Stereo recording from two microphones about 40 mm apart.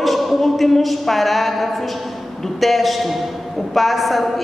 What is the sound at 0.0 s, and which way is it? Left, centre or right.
A woman's voice, centre.